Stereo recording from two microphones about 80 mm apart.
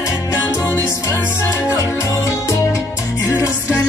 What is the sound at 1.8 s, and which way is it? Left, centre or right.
Music, left.